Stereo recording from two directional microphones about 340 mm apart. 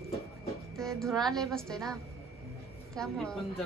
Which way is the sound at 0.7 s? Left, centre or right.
Centre.